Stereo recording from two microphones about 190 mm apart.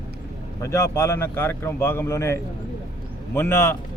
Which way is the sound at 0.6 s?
15° left (ahead or behind).